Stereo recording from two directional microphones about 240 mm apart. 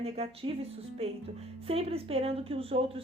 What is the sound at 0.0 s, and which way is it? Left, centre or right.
Speech, right.